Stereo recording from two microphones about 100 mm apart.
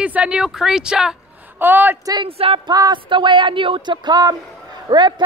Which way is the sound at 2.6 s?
45° right (ahead or behind).